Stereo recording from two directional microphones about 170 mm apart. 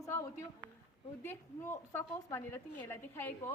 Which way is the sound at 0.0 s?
15° left (ahead or behind).